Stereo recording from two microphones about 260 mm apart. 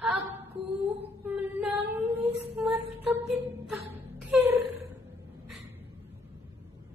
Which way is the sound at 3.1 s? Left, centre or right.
Centre.